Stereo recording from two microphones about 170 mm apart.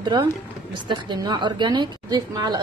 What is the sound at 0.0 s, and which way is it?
A woman's voice, 25° right (ahead or behind).